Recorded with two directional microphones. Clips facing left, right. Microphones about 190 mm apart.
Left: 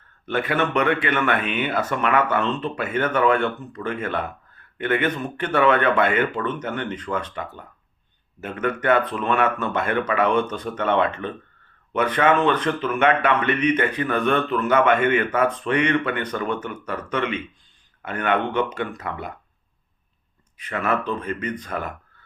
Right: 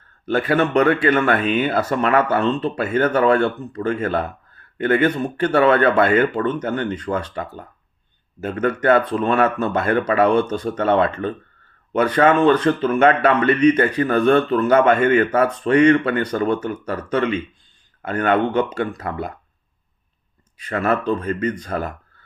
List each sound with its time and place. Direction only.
0.3 s speech: 35° right (ahead or behind)
20.6 s speech: 35° right (ahead or behind)